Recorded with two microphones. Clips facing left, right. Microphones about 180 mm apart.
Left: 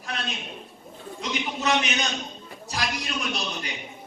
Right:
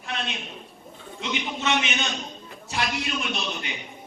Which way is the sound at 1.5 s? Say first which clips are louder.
Left 2 dB; centre (ahead or behind).